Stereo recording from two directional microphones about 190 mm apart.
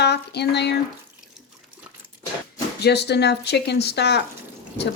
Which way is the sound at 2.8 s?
60° left (ahead or behind).